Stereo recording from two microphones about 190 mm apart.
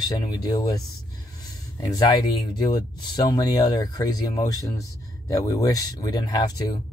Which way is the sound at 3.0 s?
20° left (ahead or behind).